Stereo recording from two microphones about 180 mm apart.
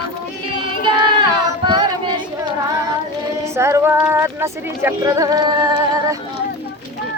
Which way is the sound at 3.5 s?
15° right (ahead or behind).